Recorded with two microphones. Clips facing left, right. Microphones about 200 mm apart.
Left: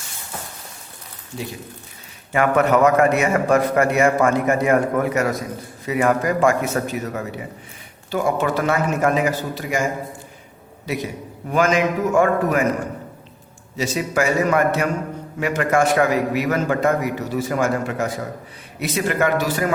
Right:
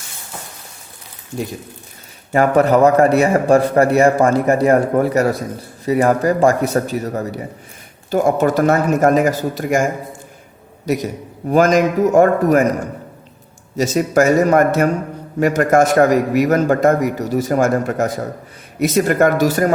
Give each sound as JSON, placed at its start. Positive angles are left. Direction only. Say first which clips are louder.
{"t": 2.3, "sound": "a man's voice", "louder": "right 4 dB", "side_deg": -35}
{"t": 13.7, "sound": "a man's voice", "louder": "right 7 dB", "side_deg": -45}